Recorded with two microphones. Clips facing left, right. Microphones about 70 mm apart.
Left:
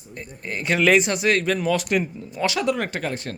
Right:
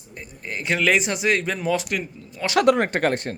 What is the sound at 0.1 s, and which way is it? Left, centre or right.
Speech, centre.